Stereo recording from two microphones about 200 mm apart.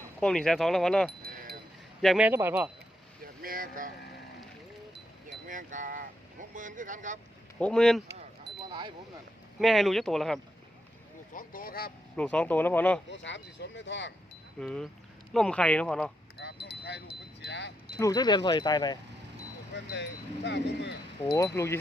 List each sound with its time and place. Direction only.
0.2 s speech: 5° left (ahead or behind)
3.4 s speech: 45° right (ahead or behind)
5.5 s speech: 40° right (ahead or behind)
7.6 s speech: 5° left (ahead or behind)
9.6 s speech: centre (ahead or behind)
11.3 s speech: 45° left (ahead or behind)
12.1 s speech: 5° left (ahead or behind)
13.1 s speech: 65° left (ahead or behind)
14.6 s speech: 5° left (ahead or behind)
16.4 s wind chime: 55° left (ahead or behind)
18.0 s speech: 20° left (ahead or behind)
19.7 s speech: 60° left (ahead or behind)
21.3 s speech: 15° left (ahead or behind)